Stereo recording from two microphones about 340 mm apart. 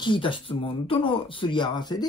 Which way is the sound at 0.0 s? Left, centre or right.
Centre.